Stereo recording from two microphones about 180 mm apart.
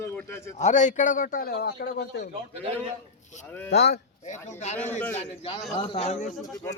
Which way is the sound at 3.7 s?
65° left (ahead or behind).